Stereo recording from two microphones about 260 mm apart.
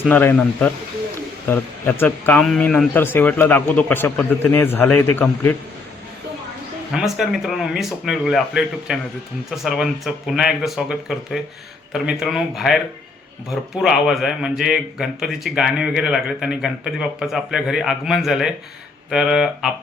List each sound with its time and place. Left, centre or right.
0.0 s a man's voice: centre
6.9 s a man's voice: centre